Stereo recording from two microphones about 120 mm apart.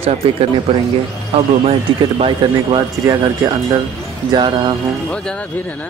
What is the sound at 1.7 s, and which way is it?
Speech, 50° right (ahead or behind).